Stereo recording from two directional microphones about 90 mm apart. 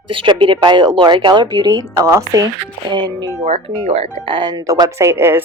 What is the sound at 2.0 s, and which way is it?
Speech, 35° right (ahead or behind).